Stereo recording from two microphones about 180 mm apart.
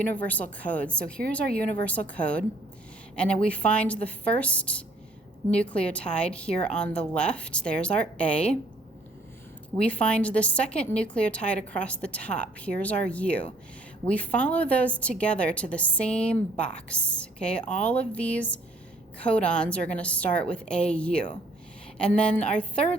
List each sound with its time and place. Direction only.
0.0 s a woman's voice: 10° left (ahead or behind)
9.7 s a woman's voice: 5° left (ahead or behind)